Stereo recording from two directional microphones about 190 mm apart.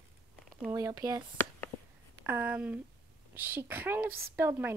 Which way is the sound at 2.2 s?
10° right (ahead or behind).